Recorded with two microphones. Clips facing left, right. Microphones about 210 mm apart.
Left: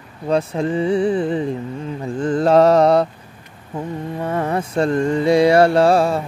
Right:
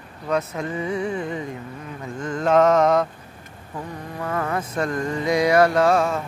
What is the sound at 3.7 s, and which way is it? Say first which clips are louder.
Mantra: left 7 dB; 25° left (ahead or behind).